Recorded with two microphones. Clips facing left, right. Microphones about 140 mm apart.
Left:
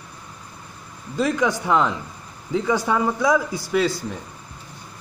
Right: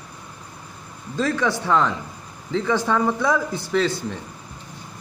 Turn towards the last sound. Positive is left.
turn(degrees=10)  # may be behind; listen again after turning